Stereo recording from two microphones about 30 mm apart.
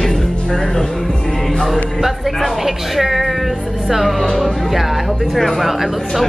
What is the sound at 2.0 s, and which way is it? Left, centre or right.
Speech, centre.